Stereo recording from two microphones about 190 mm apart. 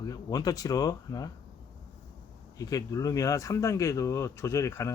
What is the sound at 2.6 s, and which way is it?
Speech, 20° left (ahead or behind).